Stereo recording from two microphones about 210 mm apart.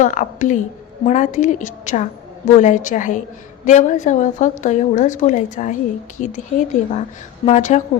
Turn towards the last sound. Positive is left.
turn(degrees=35)  # may be behind; listen again after turning